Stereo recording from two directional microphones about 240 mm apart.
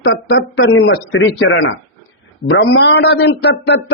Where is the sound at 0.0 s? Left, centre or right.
Left.